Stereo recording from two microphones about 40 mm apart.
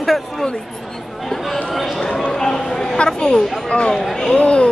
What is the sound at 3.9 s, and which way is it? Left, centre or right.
Speech, centre.